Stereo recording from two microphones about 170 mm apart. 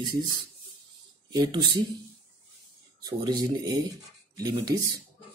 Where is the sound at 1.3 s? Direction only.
25° right (ahead or behind).